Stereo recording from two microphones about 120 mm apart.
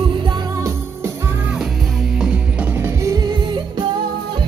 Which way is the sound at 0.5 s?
25° right (ahead or behind).